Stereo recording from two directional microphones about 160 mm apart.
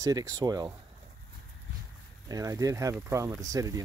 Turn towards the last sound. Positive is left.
turn(degrees=-20)  # may be behind; listen again after turning